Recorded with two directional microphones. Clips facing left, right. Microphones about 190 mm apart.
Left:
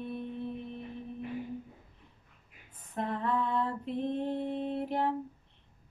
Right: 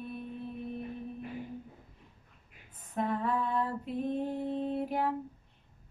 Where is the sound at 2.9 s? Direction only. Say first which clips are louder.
Right 1 dB; 5° right (ahead or behind).